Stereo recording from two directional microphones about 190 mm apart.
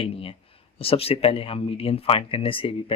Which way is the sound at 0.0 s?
30° left (ahead or behind).